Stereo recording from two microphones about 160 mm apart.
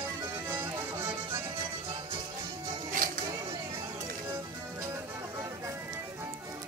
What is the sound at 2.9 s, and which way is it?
Music, 55° right (ahead or behind).